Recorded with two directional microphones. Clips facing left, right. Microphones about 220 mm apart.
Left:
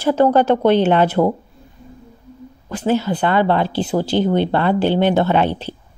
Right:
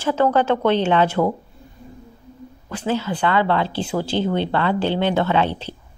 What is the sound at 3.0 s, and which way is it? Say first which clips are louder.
Speech: left 3 dB; 40° left (ahead or behind).